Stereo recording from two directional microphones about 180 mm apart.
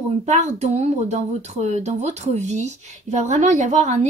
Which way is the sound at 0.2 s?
40° right (ahead or behind).